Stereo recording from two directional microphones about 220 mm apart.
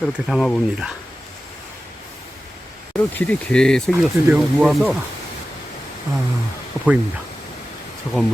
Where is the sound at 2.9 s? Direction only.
5° left (ahead or behind).